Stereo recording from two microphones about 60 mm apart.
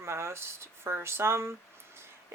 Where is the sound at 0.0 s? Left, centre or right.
Right.